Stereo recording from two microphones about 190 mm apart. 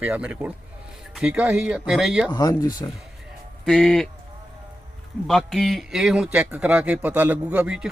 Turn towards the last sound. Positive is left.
turn(degrees=-5)  # may be behind; listen again after turning